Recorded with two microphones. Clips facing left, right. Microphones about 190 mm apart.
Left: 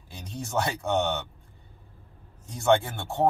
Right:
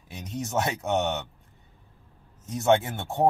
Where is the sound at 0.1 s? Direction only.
20° right (ahead or behind).